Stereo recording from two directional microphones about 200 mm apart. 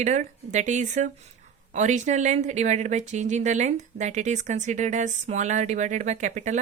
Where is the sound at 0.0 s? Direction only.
35° right (ahead or behind).